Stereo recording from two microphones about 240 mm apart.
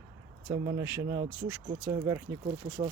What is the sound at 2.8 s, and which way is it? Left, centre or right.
Speech, right.